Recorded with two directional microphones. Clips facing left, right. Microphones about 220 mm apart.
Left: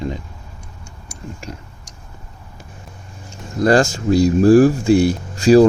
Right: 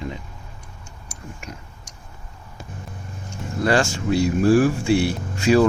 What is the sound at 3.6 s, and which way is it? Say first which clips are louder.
Speech: left 6 dB; 40° left (ahead or behind).